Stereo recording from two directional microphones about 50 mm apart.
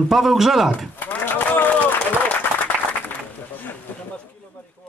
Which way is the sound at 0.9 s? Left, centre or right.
Left.